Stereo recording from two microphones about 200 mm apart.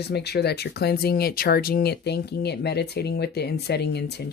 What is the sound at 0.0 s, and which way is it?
Speech, 55° left (ahead or behind).